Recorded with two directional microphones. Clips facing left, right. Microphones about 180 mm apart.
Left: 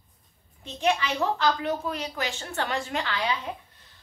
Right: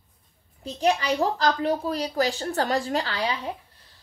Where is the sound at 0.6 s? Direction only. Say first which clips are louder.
Right 3 dB; 40° right (ahead or behind).